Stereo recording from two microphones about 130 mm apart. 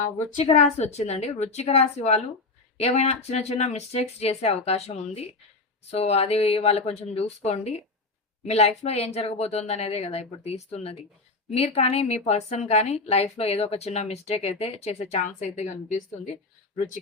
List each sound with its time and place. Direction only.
0.4 s a woman's voice: 60° left (ahead or behind)